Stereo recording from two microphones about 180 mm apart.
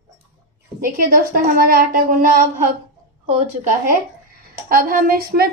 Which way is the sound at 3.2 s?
35° right (ahead or behind).